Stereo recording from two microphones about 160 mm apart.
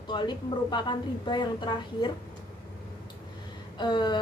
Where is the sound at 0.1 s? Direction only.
30° left (ahead or behind).